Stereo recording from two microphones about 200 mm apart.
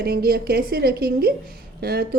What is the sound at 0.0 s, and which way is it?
A woman's voice, 50° right (ahead or behind).